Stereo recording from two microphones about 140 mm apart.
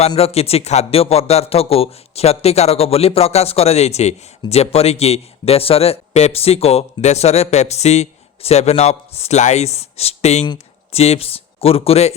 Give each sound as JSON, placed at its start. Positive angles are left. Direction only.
{"t": 0.2, "sound": "speech", "side_deg": 45}